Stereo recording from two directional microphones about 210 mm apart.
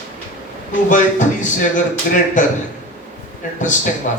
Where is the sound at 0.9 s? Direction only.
35° left (ahead or behind).